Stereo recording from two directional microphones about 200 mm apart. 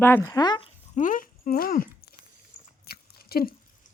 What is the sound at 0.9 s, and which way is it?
Speech, 40° left (ahead or behind).